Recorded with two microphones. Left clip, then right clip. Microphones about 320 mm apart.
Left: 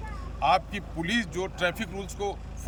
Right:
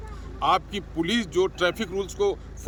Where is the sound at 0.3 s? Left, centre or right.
Centre.